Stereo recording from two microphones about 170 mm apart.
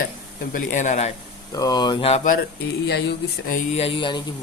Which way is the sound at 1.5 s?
20° left (ahead or behind).